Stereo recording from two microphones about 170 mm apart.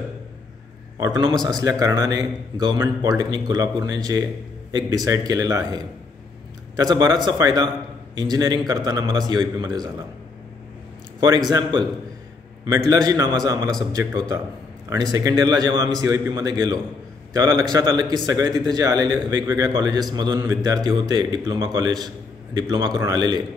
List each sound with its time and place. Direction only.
0.9 s a man's voice: 20° right (ahead or behind)
11.1 s a man's voice: 25° right (ahead or behind)
14.9 s a man's voice: 20° right (ahead or behind)